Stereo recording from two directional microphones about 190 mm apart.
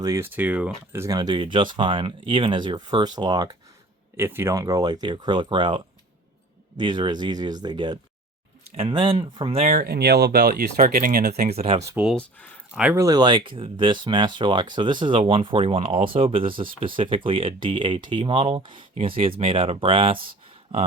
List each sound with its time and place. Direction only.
0.0 s speech: 15° right (ahead or behind); by 9.7 s 30° right (ahead or behind)
9.7 s speech: 55° right (ahead or behind)
11.3 s speech: 35° right (ahead or behind)
11.8 s speech: 15° right (ahead or behind)
12.0 s speech: 5° left (ahead or behind)
12.7 s speech: 10° right (ahead or behind); by 20.1 s 30° right (ahead or behind)